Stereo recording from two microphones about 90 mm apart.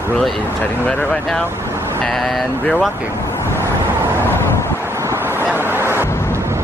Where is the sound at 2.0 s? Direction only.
5° left (ahead or behind).